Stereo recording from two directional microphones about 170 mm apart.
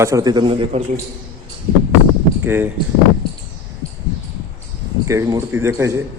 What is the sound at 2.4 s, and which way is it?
Speech, 10° right (ahead or behind).